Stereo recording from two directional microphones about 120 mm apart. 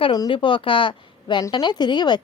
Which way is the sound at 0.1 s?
40° left (ahead or behind).